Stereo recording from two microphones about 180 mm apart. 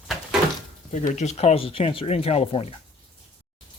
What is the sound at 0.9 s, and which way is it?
Speech, 40° left (ahead or behind).